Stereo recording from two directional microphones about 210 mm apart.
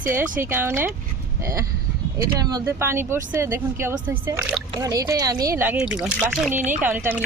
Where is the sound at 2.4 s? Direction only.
15° right (ahead or behind).